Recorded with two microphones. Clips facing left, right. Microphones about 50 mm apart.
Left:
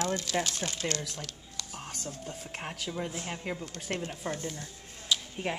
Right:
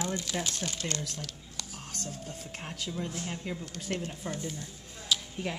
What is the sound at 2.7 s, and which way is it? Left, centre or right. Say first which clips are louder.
Speech: right 2 dB; left.